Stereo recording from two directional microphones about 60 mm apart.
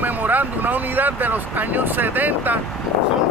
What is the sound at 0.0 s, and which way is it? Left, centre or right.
Speech, right.